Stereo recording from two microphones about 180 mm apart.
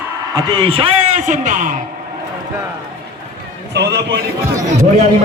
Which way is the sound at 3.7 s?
70° right (ahead or behind).